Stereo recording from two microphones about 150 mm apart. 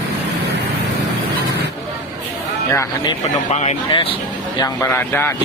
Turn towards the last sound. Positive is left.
turn(degrees=15)  # may be behind; listen again after turning